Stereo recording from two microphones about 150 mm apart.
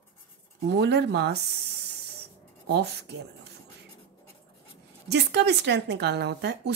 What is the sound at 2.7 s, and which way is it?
Speech, 90° right.